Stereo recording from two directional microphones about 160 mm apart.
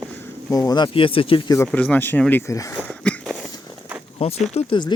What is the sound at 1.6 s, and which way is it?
Speech, 10° left (ahead or behind).